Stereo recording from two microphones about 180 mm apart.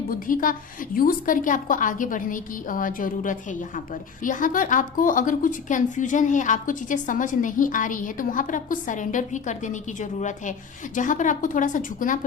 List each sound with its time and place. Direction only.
0.1 s a woman's voice: 50° left (ahead or behind)